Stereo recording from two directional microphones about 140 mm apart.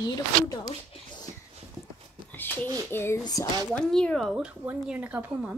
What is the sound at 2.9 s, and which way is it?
Speech, 15° left (ahead or behind).